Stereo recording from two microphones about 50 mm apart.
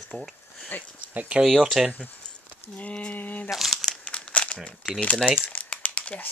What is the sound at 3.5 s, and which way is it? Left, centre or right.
Speech, centre.